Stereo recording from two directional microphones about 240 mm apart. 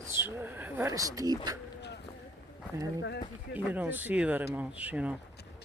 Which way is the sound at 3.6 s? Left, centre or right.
Centre.